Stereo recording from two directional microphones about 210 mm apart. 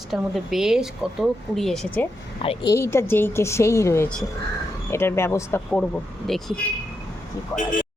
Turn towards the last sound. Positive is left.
turn(degrees=15)  # may be behind; listen again after turning